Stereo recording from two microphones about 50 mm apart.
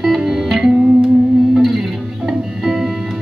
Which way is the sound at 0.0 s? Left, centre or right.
Centre.